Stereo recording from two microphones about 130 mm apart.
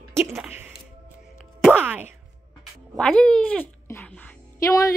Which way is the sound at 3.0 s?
5° left (ahead or behind).